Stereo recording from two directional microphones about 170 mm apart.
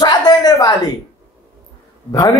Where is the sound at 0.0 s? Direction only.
25° left (ahead or behind).